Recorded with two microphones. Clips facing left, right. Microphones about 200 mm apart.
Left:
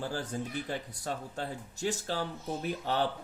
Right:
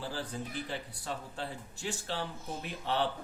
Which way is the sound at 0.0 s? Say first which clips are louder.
Left 3 dB; 45° left (ahead or behind).